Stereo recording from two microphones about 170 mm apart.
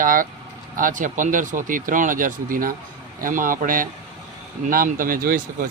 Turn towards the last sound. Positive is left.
turn(degrees=-55)  # may be behind; listen again after turning